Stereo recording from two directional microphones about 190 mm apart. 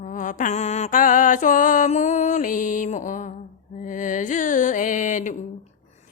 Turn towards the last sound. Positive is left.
turn(degrees=40)  # may be behind; listen again after turning